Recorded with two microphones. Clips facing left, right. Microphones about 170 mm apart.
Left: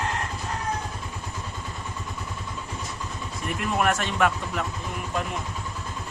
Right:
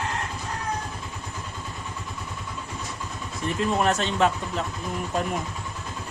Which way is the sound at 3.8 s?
25° right (ahead or behind).